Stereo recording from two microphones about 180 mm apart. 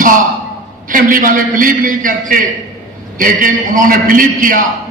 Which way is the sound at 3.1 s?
50° right (ahead or behind).